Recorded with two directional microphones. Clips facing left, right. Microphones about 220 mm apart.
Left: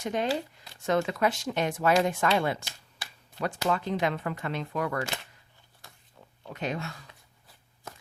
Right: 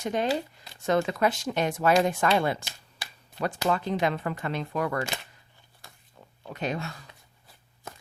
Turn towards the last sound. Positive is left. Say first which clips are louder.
# right 2 dB
turn(degrees=-35)  # may be behind; listen again after turning